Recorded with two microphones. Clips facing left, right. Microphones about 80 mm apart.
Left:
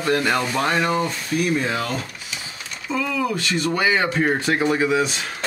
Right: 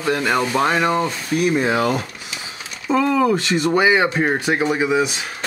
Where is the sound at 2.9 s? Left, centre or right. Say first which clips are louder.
Right 7 dB; right; by 5.3 s centre.